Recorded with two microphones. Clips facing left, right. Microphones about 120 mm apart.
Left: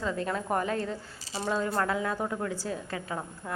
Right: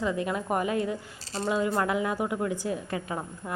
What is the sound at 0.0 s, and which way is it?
A woman's voice, 15° right (ahead or behind).